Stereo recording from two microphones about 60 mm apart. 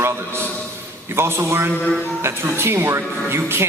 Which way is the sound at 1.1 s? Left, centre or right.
Right.